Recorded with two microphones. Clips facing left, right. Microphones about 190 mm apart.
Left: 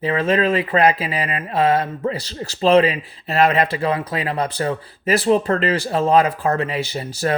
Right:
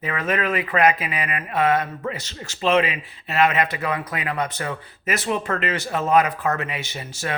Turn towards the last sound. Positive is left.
turn(degrees=35)  # may be behind; listen again after turning